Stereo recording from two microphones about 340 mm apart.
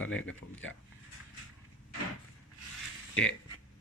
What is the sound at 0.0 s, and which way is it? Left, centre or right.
Speech, left.